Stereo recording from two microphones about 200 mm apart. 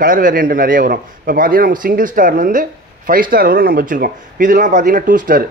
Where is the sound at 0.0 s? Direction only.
40° right (ahead or behind).